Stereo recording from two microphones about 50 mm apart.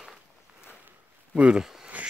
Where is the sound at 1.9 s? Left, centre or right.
Right.